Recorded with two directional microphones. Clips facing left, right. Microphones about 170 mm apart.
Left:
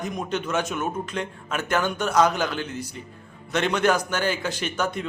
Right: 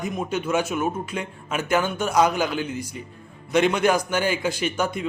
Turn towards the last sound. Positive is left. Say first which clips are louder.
# right 2 dB
turn(degrees=-10)  # may be behind; listen again after turning